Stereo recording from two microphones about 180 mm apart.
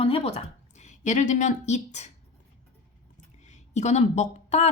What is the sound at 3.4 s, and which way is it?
A woman's voice, 40° left (ahead or behind).